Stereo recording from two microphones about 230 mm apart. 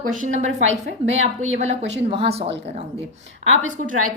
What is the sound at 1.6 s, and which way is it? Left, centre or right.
Speech, right.